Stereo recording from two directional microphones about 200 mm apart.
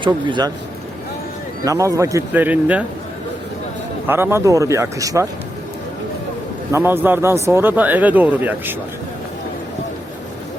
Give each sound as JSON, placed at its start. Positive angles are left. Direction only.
{"t": 0.0, "sound": "a man's voice", "side_deg": -25}
{"t": 1.6, "sound": "speech", "side_deg": -15}
{"t": 4.0, "sound": "speech", "side_deg": -10}
{"t": 6.7, "sound": "speech", "side_deg": -10}